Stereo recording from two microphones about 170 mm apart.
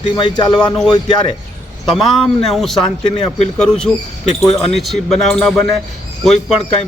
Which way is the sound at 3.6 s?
5° left (ahead or behind).